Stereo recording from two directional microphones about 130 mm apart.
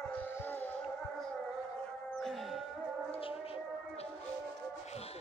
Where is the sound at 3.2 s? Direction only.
45° left (ahead or behind).